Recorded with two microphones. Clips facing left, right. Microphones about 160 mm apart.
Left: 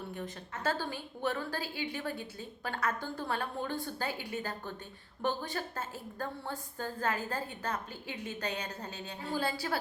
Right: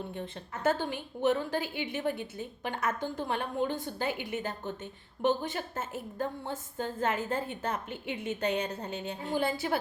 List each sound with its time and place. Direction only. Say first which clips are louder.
0.1 s a woman's voice: right 2 dB; 25° right (ahead or behind)